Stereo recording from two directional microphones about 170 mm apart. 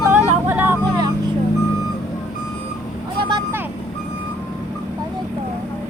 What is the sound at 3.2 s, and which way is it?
Vehicle, 25° right (ahead or behind).